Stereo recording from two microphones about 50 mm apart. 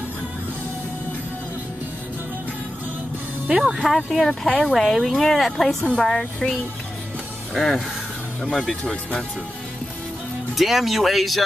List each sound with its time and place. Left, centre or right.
3.4 s speech: centre
3.9 s speech: centre
10.5 s speech: centre